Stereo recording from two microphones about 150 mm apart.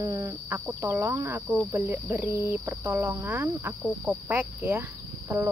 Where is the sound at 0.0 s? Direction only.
20° right (ahead or behind).